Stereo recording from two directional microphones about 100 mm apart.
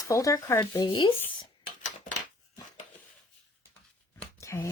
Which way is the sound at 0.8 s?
55° left (ahead or behind).